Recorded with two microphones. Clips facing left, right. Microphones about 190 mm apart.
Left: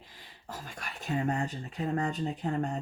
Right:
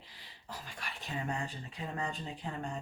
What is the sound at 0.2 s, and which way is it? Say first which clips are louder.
Speech: left 4 dB; 45° left (ahead or behind).